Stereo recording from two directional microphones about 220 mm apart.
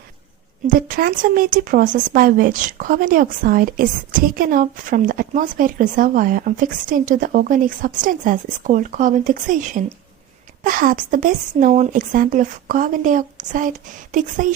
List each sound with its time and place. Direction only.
0.7 s speech: 40° right (ahead or behind)